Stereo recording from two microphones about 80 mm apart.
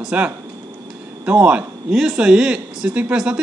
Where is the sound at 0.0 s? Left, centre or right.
Centre.